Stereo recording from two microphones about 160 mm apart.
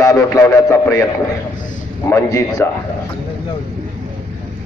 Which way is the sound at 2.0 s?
15° left (ahead or behind).